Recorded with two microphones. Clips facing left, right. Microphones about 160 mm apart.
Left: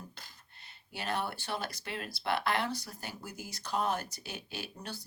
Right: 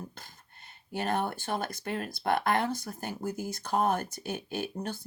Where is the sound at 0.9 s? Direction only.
50° right (ahead or behind).